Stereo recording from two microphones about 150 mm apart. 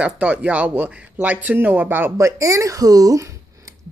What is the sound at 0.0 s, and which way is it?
Speech, 10° right (ahead or behind).